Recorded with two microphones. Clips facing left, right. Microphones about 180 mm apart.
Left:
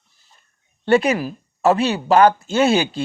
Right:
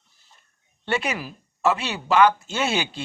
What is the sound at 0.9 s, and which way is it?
Speech, 40° left (ahead or behind).